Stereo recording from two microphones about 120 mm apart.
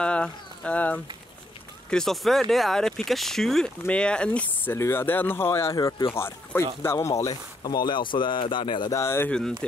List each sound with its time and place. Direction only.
0.0 s speech: 10° left (ahead or behind)
4.7 s speech: 20° left (ahead or behind)
5.8 s a man's voice: 35° left (ahead or behind)
6.0 s speech: 20° left (ahead or behind)
7.6 s a man's voice: 35° left (ahead or behind)
8.9 s speech: 20° left (ahead or behind)
9.3 s speech: 5° left (ahead or behind)